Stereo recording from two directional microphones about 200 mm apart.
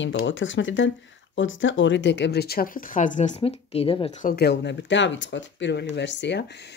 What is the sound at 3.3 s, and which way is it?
Speech, 30° left (ahead or behind).